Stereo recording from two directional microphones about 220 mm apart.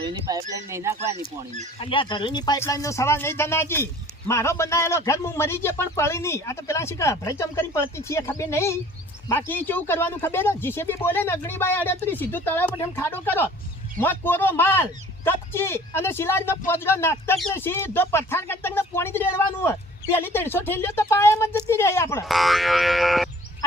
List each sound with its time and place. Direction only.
0.0 s speech: 20° right (ahead or behind)
1.8 s speech: 25° left (ahead or behind)
22.3 s boing: centre (ahead or behind)